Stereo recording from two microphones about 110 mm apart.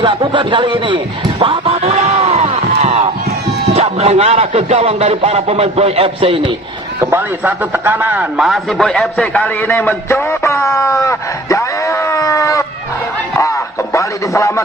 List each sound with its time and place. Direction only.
0.0 s speech: 45° right (ahead or behind)
1.4 s a sound: 60° right (ahead or behind)
3.7 s speech: 70° right (ahead or behind)
7.0 s speech: 20° right (ahead or behind)
8.4 s a man's voice: centre (ahead or behind); by 12.6 s 30° left (ahead or behind)
13.3 s radio: 30° left (ahead or behind)